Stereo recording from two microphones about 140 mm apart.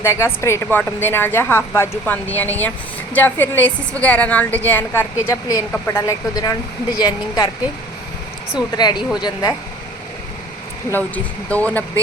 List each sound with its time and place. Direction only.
0.0 s a woman's voice: 20° left (ahead or behind)
8.7 s speech: 30° left (ahead or behind)
10.9 s a woman's voice: 10° left (ahead or behind)